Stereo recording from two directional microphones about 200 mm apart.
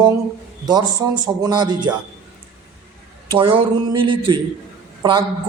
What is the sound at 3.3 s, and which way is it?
Speech, 25° right (ahead or behind).